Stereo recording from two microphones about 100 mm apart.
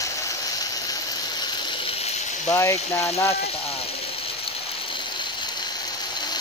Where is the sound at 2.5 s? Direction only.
30° left (ahead or behind).